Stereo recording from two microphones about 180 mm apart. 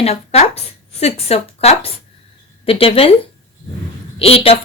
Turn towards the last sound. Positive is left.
turn(degrees=30)  # may be behind; listen again after turning